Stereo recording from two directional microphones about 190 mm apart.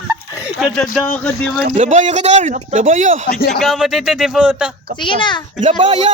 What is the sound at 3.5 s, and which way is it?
Speech, centre (ahead or behind).